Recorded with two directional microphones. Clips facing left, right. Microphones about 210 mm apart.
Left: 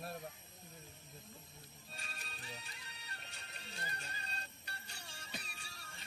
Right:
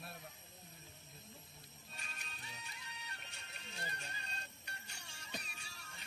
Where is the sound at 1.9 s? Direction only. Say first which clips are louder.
Left 2 dB; 35° left (ahead or behind).